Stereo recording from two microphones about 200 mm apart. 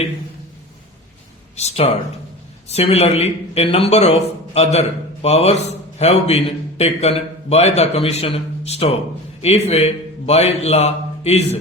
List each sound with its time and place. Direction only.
1.5 s a man's voice: 30° left (ahead or behind)